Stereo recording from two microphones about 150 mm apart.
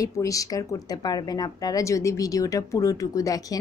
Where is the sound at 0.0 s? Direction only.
20° left (ahead or behind).